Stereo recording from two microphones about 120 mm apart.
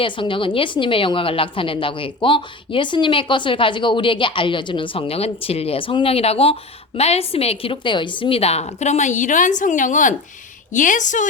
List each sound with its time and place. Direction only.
0.0 s a woman's voice: 45° left (ahead or behind); by 11.3 s 90° left